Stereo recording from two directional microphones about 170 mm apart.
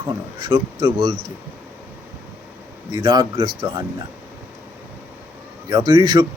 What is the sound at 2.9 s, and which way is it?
Speech, 25° right (ahead or behind).